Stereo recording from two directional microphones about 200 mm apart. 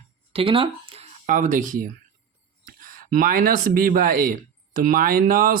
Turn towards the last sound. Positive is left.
turn(degrees=-45)  # may be behind; listen again after turning